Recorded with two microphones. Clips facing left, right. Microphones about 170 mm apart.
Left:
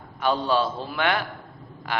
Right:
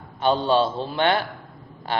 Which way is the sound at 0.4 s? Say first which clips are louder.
Right 3 dB; 25° right (ahead or behind).